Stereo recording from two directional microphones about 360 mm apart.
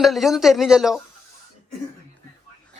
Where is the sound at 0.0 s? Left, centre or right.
Centre.